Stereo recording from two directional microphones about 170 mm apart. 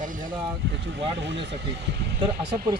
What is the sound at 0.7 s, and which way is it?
Speech, 90° right.